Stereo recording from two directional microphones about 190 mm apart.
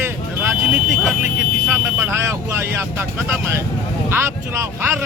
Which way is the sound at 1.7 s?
15° right (ahead or behind).